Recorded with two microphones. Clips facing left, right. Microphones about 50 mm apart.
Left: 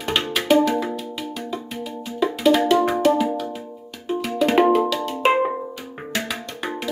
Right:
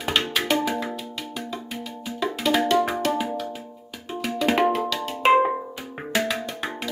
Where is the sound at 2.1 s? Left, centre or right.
Centre.